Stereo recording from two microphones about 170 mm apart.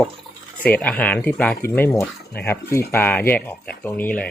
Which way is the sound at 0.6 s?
10° left (ahead or behind).